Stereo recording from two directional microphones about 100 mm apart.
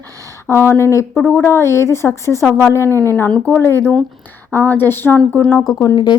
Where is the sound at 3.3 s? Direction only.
10° left (ahead or behind).